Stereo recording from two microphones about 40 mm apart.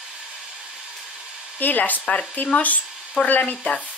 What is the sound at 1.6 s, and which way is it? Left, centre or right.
Speech, left.